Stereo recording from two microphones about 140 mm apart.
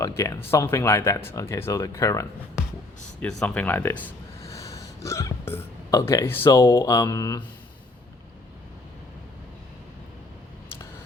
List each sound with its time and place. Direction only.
0.0 s speech: 20° left (ahead or behind)
3.2 s speech: 10° left (ahead or behind)
4.5 s speech: 25° left (ahead or behind)